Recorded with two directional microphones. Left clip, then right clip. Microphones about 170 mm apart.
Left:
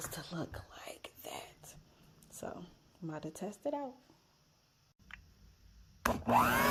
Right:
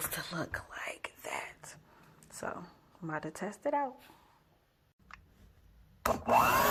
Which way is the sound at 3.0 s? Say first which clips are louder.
Right 5 dB; 5° left (ahead or behind).